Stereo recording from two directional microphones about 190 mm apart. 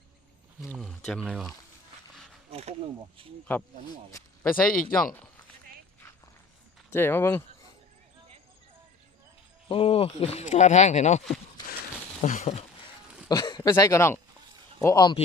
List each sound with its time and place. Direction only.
0.8 s speech: centre (ahead or behind)
2.5 s speech: 30° right (ahead or behind)
4.5 s speech: 50° left (ahead or behind)
6.9 s speech: 10° left (ahead or behind)
9.6 s speech: 30° left (ahead or behind)
12.2 s speech: 40° left (ahead or behind)
13.2 s speech: 20° left (ahead or behind)